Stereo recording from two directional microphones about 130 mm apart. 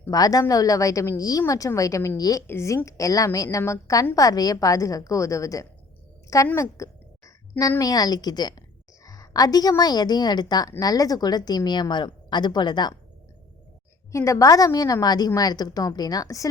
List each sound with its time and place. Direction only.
0.1 s a woman's voice: 30° left (ahead or behind)
14.1 s a woman's voice: 25° left (ahead or behind)